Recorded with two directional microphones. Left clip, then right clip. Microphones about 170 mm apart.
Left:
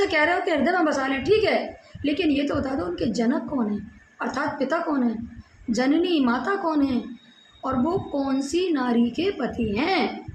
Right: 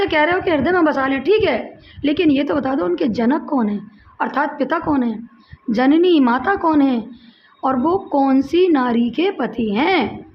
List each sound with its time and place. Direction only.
0.0 s a woman's voice: 55° right (ahead or behind)